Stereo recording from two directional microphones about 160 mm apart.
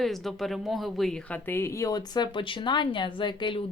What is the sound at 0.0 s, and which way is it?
A woman's voice, centre (ahead or behind).